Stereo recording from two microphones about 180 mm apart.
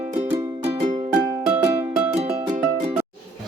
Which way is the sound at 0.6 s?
35° right (ahead or behind).